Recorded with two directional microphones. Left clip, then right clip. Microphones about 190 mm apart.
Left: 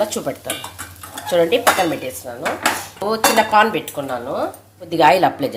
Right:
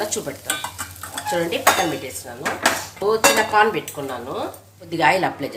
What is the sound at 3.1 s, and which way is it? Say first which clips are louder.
Dishes: left 2 dB; 45° left (ahead or behind).